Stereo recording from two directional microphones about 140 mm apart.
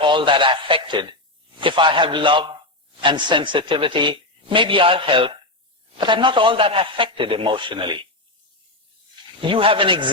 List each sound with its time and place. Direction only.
0.0 s a man's voice: 35° right (ahead or behind)
9.4 s a man's voice: 40° right (ahead or behind)